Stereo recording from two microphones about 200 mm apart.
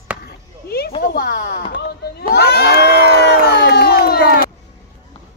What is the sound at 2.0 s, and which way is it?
Crowd, 50° left (ahead or behind).